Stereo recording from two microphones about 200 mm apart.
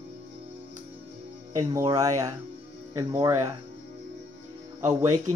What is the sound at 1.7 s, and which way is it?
Speech, 20° right (ahead or behind).